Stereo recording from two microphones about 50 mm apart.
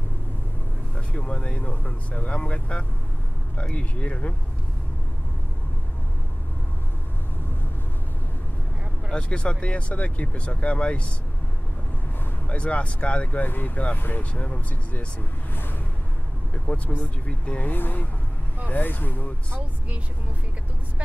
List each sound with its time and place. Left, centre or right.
0.9 s speech: left
9.1 s speech: left
12.4 s speech: left
13.5 s speech: left
14.3 s speech: left
16.5 s speech: left
17.6 s speech: left